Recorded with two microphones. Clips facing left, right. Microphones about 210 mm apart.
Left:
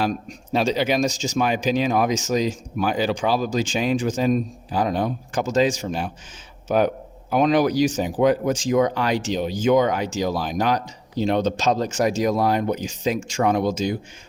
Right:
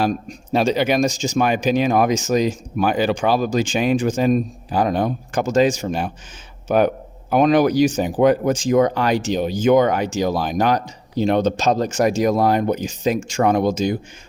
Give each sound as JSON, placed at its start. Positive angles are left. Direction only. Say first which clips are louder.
{"t": 0.0, "sound": "speech", "louder": "right 3 dB", "side_deg": -50}